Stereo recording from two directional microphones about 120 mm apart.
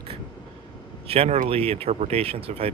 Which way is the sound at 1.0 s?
55° right (ahead or behind).